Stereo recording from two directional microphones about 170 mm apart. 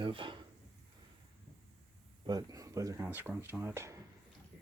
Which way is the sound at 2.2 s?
20° right (ahead or behind).